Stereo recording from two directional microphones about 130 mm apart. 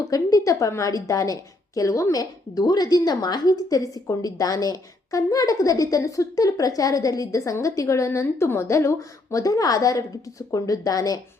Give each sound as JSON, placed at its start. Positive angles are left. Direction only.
{"t": 0.0, "sound": "a woman's voice", "side_deg": 25}